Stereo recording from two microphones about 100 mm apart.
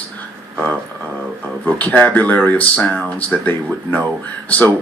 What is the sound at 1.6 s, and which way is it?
Speech, 15° left (ahead or behind).